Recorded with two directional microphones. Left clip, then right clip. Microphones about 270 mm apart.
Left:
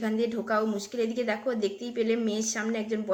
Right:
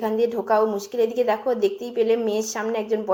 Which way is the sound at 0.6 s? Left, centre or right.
Right.